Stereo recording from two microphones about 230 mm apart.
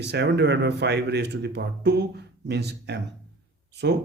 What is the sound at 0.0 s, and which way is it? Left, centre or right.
Speech, right.